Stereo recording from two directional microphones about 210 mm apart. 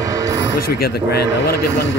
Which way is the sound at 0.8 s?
50° left (ahead or behind).